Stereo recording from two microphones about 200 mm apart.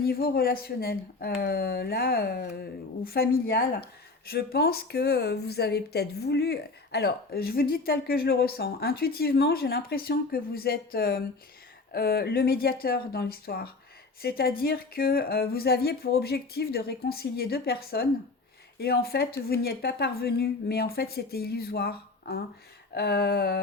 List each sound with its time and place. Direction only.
0.0 s speech: 50° left (ahead or behind)